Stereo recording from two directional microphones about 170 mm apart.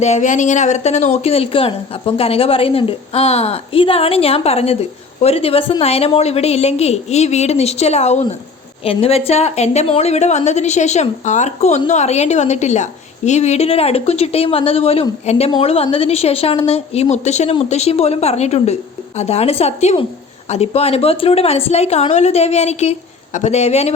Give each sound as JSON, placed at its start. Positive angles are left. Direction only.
{"t": 0.0, "sound": "speech", "side_deg": 45}